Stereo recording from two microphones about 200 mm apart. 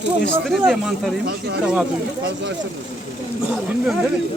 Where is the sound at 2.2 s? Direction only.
60° right (ahead or behind).